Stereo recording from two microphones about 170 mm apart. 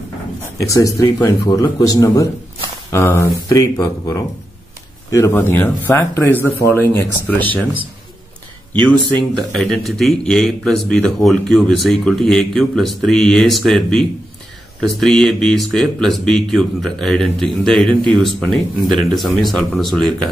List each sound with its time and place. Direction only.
0.6 s speech: 20° left (ahead or behind)
9.4 s speech: centre (ahead or behind)